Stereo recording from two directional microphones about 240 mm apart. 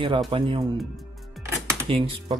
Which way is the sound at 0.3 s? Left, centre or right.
Right.